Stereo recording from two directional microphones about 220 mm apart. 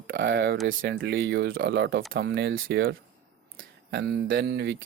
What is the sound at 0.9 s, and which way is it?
Speech, 55° right (ahead or behind).